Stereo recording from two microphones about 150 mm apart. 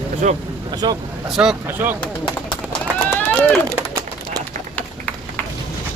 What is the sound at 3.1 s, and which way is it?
Run, 10° left (ahead or behind).